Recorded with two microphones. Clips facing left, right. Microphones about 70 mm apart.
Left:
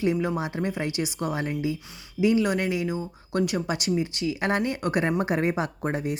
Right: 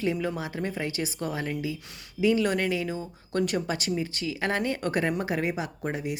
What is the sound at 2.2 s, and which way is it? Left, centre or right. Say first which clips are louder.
A woman's voice: left 1 dB; centre.